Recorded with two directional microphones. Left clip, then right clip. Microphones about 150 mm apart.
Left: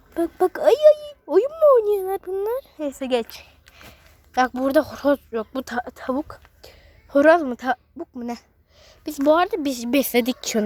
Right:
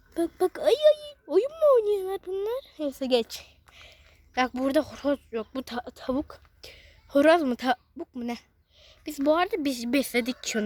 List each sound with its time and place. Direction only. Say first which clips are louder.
0.1 s a child's voice: left 5 dB; 15° right (ahead or behind)
1.5 s speech: left 6 dB; 15° right (ahead or behind)
1.8 s speech: left 5 dB; centre (ahead or behind)
3.1 s a sound: even; 25° right (ahead or behind)
4.4 s speech: left 6 dB; 5° right (ahead or behind)
4.9 s speech: left 7 dB; 10° left (ahead or behind)
5.9 s speech: left 4 dB; 15° right (ahead or behind)
7.1 s a woman's voice: left 5 dB; 15° right (ahead or behind)
7.4 s speech: left 2 dB; 30° right (ahead or behind)
8.8 s a woman's voice: left 6 dB; centre (ahead or behind)
10.0 s speech: left 7 dB; 15° left (ahead or behind)